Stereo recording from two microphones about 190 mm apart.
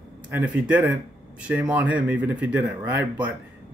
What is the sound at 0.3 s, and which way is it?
Speech, 10° right (ahead or behind).